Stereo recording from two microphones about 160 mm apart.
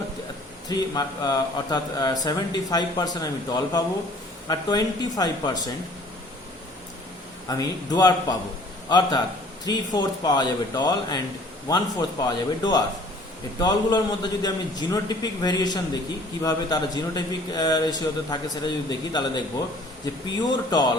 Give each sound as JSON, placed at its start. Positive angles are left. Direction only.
{"t": 0.7, "sound": "a man's voice", "side_deg": 25}
{"t": 7.4, "sound": "a man's voice", "side_deg": 25}